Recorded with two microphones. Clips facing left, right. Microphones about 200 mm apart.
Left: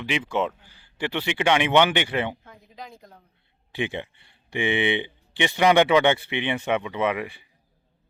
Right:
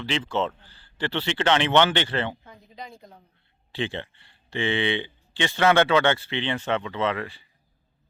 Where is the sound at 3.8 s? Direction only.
15° left (ahead or behind).